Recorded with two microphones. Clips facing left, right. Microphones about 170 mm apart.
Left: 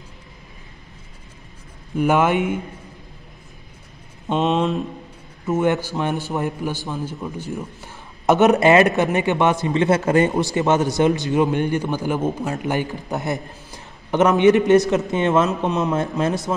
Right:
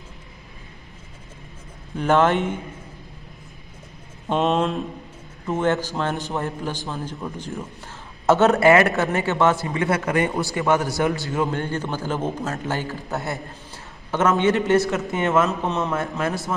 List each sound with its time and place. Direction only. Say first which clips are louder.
2.0 s speech: left 1 dB; 10° left (ahead or behind)
4.3 s speech: left 1 dB; 5° right (ahead or behind); by 16.5 s 20° left (ahead or behind)